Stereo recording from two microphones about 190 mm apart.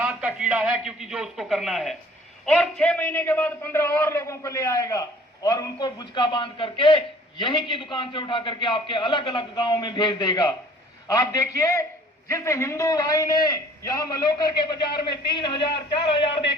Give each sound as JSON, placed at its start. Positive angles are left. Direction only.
{"t": 0.0, "sound": "a man's voice", "side_deg": -5}